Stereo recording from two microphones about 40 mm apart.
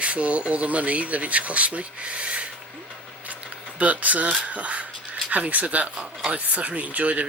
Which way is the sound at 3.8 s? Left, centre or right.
Right.